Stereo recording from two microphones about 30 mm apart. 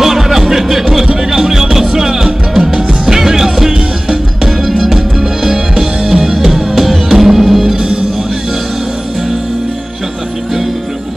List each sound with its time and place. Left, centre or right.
0.0 s music: centre